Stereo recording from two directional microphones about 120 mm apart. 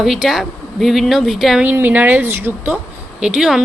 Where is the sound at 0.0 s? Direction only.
Centre (ahead or behind).